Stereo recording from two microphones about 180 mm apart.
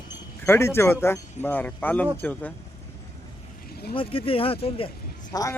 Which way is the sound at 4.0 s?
30° left (ahead or behind).